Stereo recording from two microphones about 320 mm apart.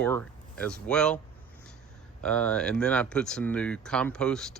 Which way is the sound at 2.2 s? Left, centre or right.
Centre.